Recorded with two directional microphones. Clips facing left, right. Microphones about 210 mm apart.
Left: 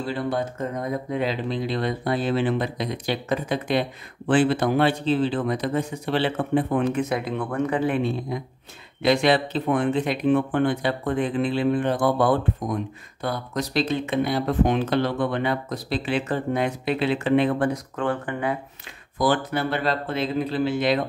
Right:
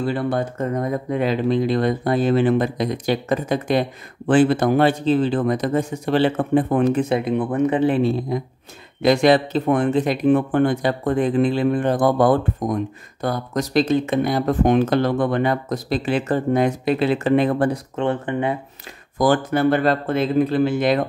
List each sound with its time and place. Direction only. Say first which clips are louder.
0.0 s speech: right 4 dB; 50° right (ahead or behind); by 8.4 s 35° right (ahead or behind)
9.0 s speech: right 4 dB; 45° right (ahead or behind)
17.9 s speech: right 4 dB; 25° right (ahead or behind)
19.1 s speech: right 5 dB; 45° right (ahead or behind)